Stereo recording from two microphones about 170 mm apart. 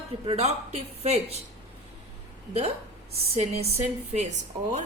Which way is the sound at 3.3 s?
40° right (ahead or behind).